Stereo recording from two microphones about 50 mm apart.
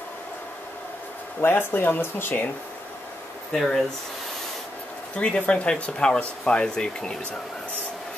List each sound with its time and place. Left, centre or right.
1.4 s speech: left
3.5 s speech: centre
5.1 s speech: centre